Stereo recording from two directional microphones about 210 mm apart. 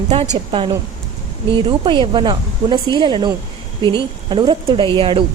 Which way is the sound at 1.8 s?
20° right (ahead or behind).